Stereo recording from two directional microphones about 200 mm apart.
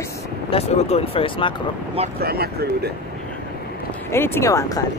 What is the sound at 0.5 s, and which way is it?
Speech, 30° left (ahead or behind).